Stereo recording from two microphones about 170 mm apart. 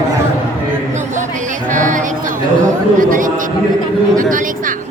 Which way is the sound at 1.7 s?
50° right (ahead or behind).